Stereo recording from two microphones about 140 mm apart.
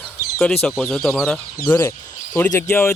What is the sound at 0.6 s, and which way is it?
Speech, centre (ahead or behind).